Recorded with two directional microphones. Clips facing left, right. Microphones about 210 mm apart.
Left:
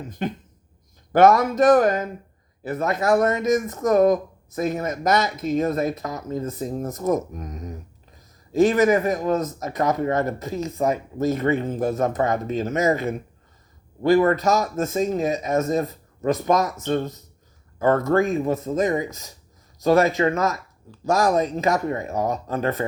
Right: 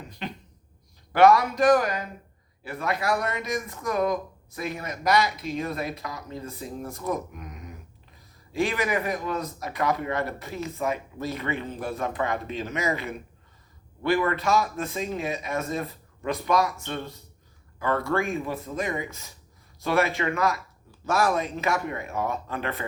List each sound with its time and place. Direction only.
0.1 s speech: 50° left (ahead or behind)